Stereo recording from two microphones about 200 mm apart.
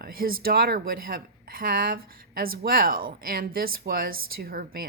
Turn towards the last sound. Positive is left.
turn(degrees=-50)  # may be behind; listen again after turning